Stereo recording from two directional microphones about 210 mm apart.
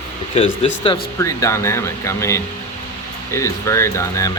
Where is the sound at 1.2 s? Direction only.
15° left (ahead or behind).